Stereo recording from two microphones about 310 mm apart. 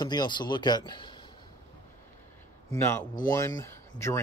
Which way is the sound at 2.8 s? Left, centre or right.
Centre.